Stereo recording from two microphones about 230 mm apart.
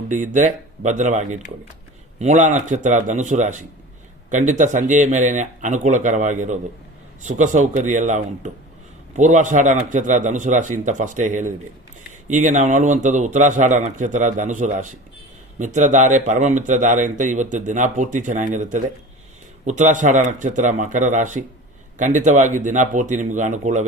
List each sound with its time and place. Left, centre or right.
0.3 s a man's voice: right